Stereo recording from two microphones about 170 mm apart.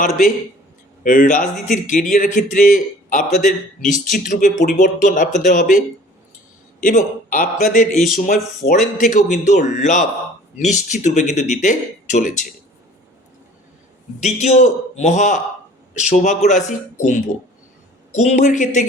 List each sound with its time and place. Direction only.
1.0 s speech: 50° left (ahead or behind)
14.2 s speech: 40° left (ahead or behind)